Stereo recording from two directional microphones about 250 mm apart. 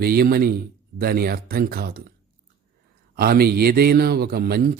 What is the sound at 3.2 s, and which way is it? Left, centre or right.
A man's voice, right.